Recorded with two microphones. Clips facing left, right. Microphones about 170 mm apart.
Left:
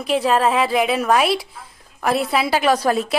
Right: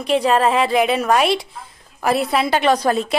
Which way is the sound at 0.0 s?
Centre (ahead or behind).